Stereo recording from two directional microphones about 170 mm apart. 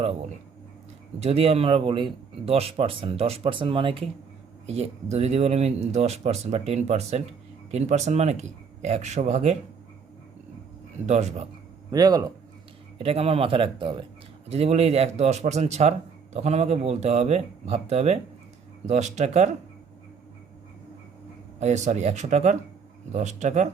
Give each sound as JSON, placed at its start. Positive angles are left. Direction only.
{"t": 1.2, "sound": "speech", "side_deg": -35}
{"t": 11.0, "sound": "speech", "side_deg": -40}
{"t": 11.9, "sound": "speech", "side_deg": -20}
{"t": 13.0, "sound": "speech", "side_deg": -35}
{"t": 21.6, "sound": "speech", "side_deg": -45}